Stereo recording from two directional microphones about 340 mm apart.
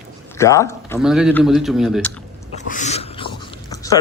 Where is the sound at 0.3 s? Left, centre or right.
Centre.